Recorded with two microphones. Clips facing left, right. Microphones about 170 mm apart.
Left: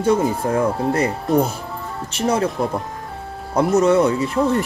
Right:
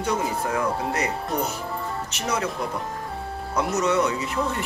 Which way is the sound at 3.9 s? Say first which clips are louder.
Left 7 dB; 30° left (ahead or behind).